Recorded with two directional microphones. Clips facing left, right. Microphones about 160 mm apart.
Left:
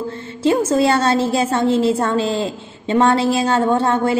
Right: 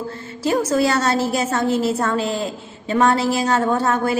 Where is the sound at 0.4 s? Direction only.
25° left (ahead or behind).